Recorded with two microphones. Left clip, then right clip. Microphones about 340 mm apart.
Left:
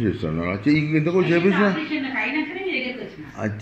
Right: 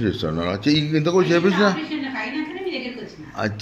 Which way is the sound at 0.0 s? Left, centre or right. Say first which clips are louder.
Right 2 dB; right.